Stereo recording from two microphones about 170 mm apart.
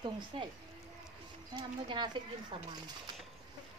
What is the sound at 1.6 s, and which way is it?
Speech, 25° right (ahead or behind).